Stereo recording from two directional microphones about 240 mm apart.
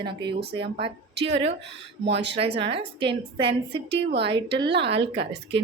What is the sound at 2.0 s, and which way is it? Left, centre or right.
Speech, right.